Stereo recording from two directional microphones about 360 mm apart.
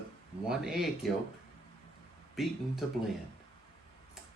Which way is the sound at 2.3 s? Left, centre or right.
Centre.